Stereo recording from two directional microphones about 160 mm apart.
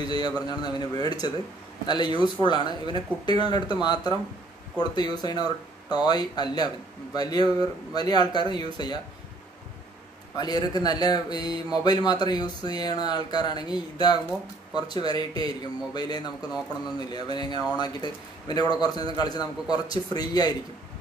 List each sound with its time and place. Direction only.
0.1 s speech: 25° left (ahead or behind)
10.3 s speech: 25° left (ahead or behind)